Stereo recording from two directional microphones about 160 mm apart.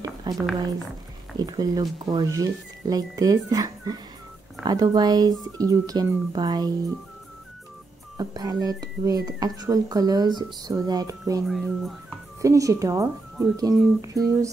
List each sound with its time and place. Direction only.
0.0 s a sound: 20° right (ahead or behind)
1.3 s speech: 25° right (ahead or behind)
8.2 s speech: 25° right (ahead or behind)
11.4 s speech: centre (ahead or behind)
12.4 s speech: 20° right (ahead or behind)